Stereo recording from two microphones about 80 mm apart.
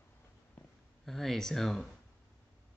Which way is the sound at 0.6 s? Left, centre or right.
Left.